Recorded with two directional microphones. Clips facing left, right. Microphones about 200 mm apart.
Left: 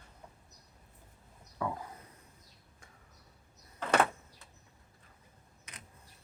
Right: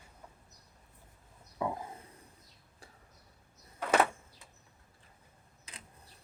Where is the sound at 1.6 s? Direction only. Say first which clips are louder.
Right 1 dB; 20° right (ahead or behind).